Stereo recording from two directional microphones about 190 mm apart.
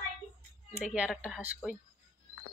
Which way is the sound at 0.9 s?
5° right (ahead or behind).